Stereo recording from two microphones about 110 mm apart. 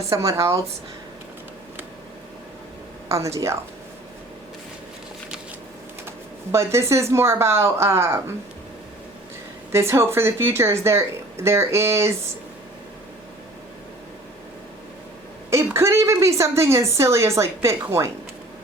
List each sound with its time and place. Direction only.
0.1 s a woman's voice: 25° right (ahead or behind)
3.1 s a woman's voice: 25° right (ahead or behind)
6.1 s a woman's voice: 25° right (ahead or behind)
9.7 s a woman's voice: 25° right (ahead or behind)
15.4 s a woman's voice: 25° right (ahead or behind)